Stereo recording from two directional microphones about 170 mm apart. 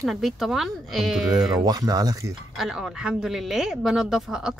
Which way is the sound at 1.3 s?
25° right (ahead or behind).